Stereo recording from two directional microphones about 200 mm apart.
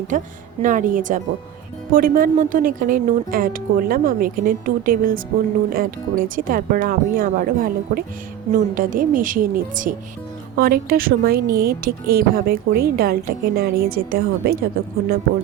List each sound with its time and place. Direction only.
0.1 s a woman's voice: 40° right (ahead or behind)